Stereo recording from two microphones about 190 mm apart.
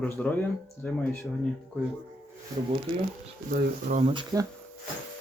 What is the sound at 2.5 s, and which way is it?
Speech, 20° right (ahead or behind).